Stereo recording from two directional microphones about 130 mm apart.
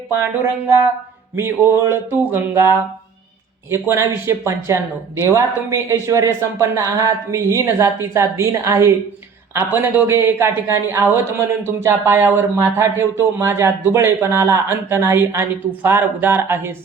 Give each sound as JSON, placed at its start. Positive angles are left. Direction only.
{"t": 0.1, "sound": "speech", "side_deg": -15}